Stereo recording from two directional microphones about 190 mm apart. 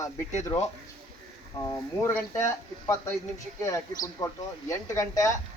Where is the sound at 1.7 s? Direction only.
15° left (ahead or behind).